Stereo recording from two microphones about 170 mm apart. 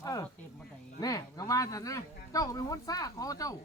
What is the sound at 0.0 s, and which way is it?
Speech, 20° left (ahead or behind).